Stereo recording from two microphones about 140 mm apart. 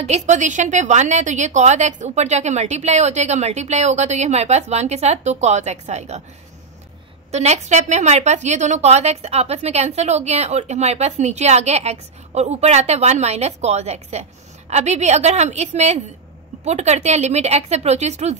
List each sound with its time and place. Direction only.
0.0 s a woman's voice: 55° right (ahead or behind)
7.2 s a woman's voice: 50° right (ahead or behind)